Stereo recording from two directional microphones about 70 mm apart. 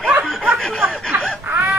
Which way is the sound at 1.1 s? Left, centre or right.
Right.